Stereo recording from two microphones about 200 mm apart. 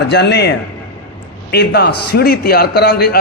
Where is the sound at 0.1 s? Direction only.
55° left (ahead or behind).